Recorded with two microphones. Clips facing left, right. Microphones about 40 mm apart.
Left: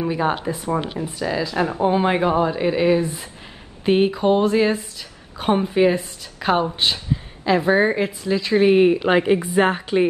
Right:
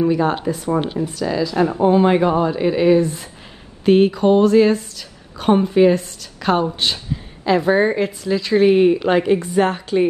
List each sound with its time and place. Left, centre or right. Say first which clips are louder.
0.5 s speech: right 3 dB; centre; by 1.8 s left
1.8 s speech: right 4 dB; centre